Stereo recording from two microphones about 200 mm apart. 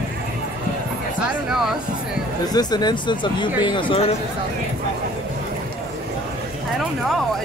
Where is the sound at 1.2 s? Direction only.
Centre (ahead or behind).